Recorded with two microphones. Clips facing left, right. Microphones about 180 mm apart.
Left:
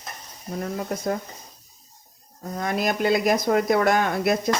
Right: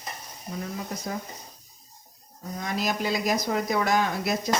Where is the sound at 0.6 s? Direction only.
55° left (ahead or behind).